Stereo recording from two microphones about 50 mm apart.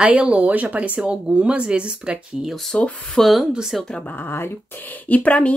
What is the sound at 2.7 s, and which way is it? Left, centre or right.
Speech, left.